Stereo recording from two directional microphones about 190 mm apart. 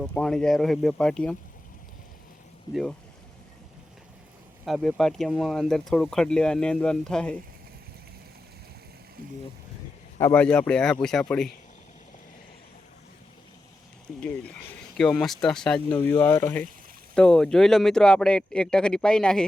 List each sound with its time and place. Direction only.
0.0 s speech: 5° left (ahead or behind)
2.7 s speech: 20° left (ahead or behind)
4.6 s speech: centre (ahead or behind)
10.2 s speech: 10° left (ahead or behind)
14.9 s speech: 5° left (ahead or behind)